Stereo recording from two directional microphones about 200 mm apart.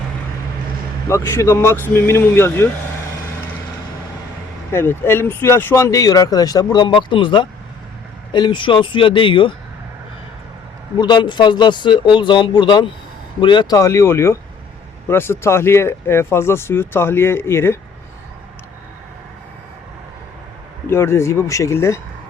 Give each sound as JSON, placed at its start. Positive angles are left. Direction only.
{"t": 1.0, "sound": "speech", "side_deg": 15}
{"t": 4.7, "sound": "speech", "side_deg": 10}
{"t": 10.9, "sound": "speech", "side_deg": 20}
{"t": 20.8, "sound": "speech", "side_deg": 10}